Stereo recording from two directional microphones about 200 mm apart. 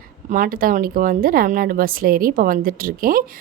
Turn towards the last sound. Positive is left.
turn(degrees=-45)  # may be behind; listen again after turning